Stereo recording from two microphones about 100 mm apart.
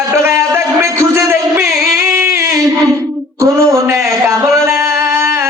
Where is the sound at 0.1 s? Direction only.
30° right (ahead or behind).